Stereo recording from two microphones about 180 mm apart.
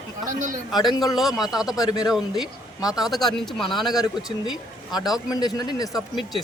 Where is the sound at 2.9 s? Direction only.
Centre (ahead or behind).